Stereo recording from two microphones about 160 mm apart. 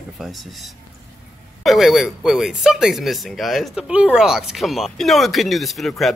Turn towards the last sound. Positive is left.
turn(degrees=0)  # may be behind; listen again after turning